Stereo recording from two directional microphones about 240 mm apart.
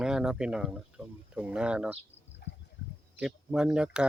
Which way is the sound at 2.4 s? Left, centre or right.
Left.